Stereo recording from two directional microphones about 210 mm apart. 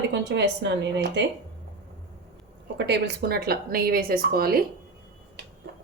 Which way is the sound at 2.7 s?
55° right (ahead or behind).